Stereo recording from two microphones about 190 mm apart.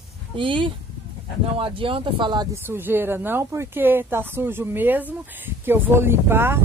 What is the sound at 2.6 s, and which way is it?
Speech, 10° right (ahead or behind).